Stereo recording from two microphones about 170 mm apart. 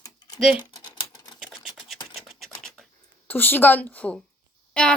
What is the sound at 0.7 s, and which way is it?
Typing, 25° left (ahead or behind).